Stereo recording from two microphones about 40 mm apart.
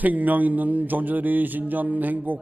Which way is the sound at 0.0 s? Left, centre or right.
Right.